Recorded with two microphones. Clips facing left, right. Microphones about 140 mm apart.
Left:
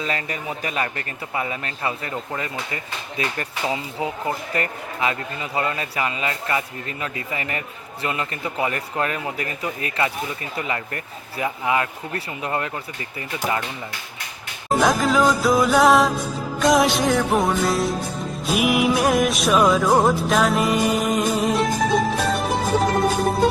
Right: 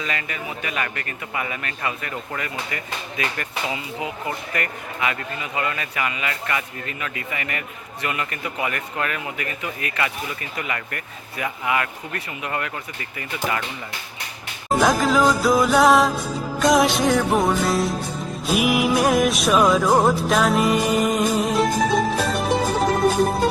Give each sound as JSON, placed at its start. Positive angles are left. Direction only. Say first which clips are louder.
{"t": 0.0, "sound": "a man's voice", "louder": "left 2 dB", "side_deg": 35}
{"t": 14.7, "sound": "music", "louder": "even", "side_deg": 0}